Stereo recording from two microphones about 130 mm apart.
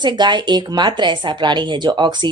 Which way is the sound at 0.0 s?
35° right (ahead or behind).